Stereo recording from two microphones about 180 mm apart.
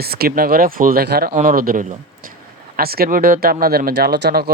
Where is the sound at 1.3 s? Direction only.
50° right (ahead or behind); by 4.5 s 65° right (ahead or behind).